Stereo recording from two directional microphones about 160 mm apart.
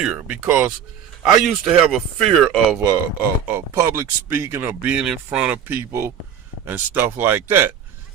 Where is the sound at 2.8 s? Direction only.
20° right (ahead or behind).